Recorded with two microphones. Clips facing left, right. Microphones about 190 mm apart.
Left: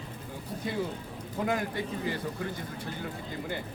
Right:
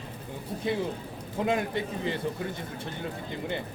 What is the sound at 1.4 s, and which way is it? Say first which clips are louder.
Speech: right 3 dB; 25° right (ahead or behind).